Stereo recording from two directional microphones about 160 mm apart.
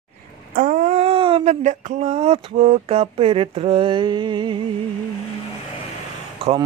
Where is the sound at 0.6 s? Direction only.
55° right (ahead or behind); by 4.6 s 30° right (ahead or behind).